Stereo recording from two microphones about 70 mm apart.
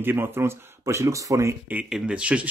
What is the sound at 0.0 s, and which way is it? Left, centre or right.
Speech, right.